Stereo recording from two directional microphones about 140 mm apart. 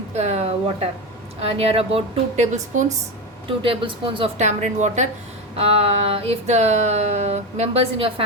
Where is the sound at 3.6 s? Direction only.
35° right (ahead or behind).